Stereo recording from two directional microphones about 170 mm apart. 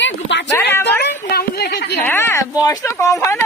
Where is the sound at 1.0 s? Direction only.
70° left (ahead or behind).